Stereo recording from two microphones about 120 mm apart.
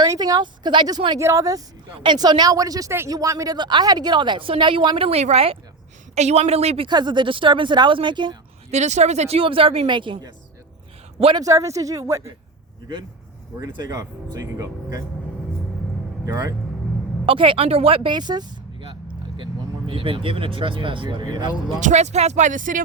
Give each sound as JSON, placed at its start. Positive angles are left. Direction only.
{"t": 0.1, "sound": "a woman's voice", "side_deg": -30}
{"t": 1.2, "sound": "a woman's voice", "side_deg": -25}
{"t": 5.0, "sound": "a woman's voice", "side_deg": -60}
{"t": 6.8, "sound": "a woman's voice", "side_deg": -40}
{"t": 8.7, "sound": "speech", "side_deg": -75}
{"t": 11.3, "sound": "speech", "side_deg": -30}
{"t": 13.7, "sound": "a woman's voice", "side_deg": -30}
{"t": 16.2, "sound": "speech", "side_deg": -30}
{"t": 17.2, "sound": "speech", "side_deg": -45}
{"t": 21.8, "sound": "speech", "side_deg": -80}